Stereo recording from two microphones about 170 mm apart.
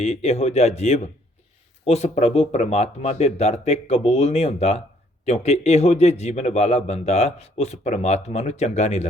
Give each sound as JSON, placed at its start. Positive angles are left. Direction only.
{"t": 0.0, "sound": "a man's voice", "side_deg": 40}